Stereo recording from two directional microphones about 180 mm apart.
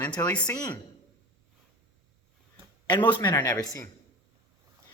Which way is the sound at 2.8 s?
25° left (ahead or behind).